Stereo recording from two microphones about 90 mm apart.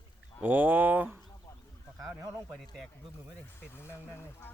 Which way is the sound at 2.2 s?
30° right (ahead or behind).